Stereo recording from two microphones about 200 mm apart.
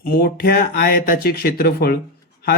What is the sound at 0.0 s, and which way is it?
Speech, 50° left (ahead or behind).